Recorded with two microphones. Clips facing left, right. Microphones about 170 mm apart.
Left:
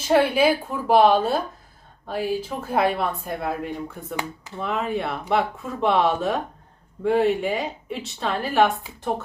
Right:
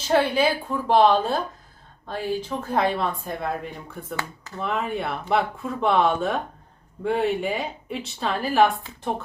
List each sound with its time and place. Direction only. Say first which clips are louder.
0.1 s speech: left 2 dB; 10° left (ahead or behind)
4.2 s speech: left 2 dB; 20° left (ahead or behind)
4.6 s speech: left 1 dB; centre (ahead or behind)